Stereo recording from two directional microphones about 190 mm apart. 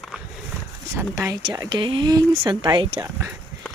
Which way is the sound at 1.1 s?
15° right (ahead or behind).